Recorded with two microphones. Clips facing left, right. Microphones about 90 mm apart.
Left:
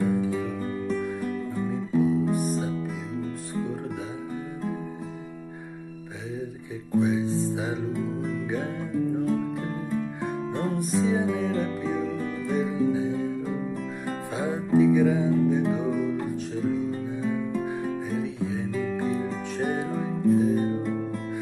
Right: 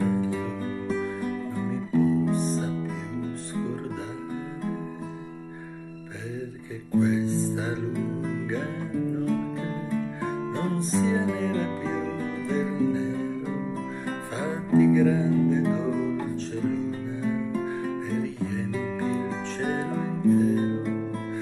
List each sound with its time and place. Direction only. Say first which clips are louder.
0.1 s music: left 1 dB; 10° left (ahead or behind)
1.7 s music: right 1 dB; 10° left (ahead or behind)
6.9 s music: even; 15° left (ahead or behind)
10.2 s music: even; 15° left (ahead or behind)
17.6 s music: even; 15° left (ahead or behind)
20.5 s music: even; 25° right (ahead or behind)